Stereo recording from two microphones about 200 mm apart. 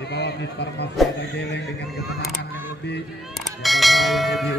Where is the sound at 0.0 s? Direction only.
55° left (ahead or behind).